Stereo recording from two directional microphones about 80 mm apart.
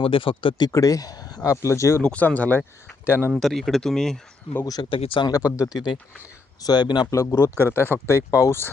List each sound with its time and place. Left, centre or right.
0.1 s speech: left
0.7 s speech: left
2.0 s speech: centre
3.3 s speech: centre
4.6 s speech: left
4.9 s speech: left
5.3 s speech: left
5.7 s speech: left
6.7 s speech: left
7.1 s speech: left